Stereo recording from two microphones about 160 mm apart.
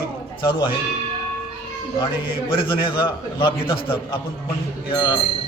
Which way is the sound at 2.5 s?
30° left (ahead or behind).